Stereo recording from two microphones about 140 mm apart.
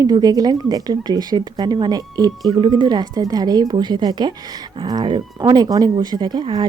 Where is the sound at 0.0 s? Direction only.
25° right (ahead or behind).